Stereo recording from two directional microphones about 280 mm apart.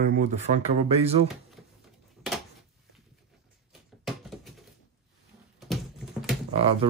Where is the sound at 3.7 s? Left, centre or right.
Centre.